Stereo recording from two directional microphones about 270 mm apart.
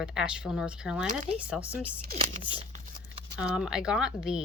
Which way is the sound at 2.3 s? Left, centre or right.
Right.